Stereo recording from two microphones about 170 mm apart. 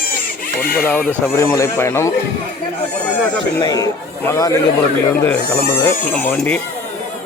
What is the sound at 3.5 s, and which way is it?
Speech, 20° left (ahead or behind).